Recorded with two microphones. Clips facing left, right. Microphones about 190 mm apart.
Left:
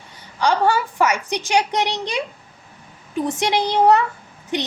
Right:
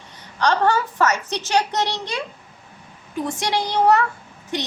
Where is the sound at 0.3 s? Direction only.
10° left (ahead or behind).